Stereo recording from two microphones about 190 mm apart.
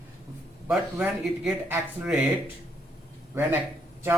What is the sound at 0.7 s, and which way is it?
A man's voice, centre (ahead or behind).